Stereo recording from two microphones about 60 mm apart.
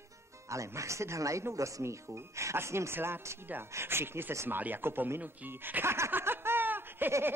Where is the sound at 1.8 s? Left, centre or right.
Right.